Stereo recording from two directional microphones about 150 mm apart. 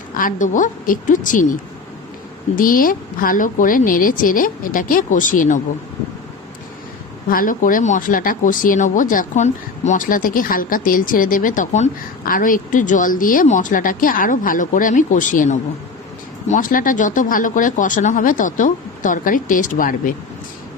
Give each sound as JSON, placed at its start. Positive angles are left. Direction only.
{"t": 0.2, "sound": "speech", "side_deg": 60}
{"t": 2.6, "sound": "speech", "side_deg": 70}
{"t": 7.3, "sound": "speech", "side_deg": 65}